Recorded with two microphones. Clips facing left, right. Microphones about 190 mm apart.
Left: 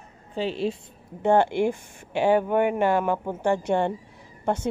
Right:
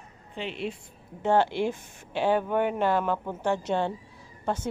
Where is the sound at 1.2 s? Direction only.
15° left (ahead or behind).